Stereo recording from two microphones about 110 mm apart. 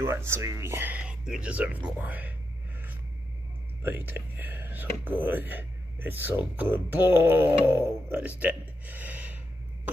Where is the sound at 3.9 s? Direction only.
20° right (ahead or behind).